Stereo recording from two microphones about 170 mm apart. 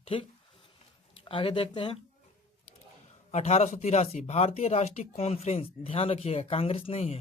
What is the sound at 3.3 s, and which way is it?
Speech, 40° left (ahead or behind).